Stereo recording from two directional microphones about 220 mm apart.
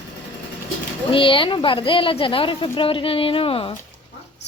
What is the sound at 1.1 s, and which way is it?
Speech, 25° left (ahead or behind).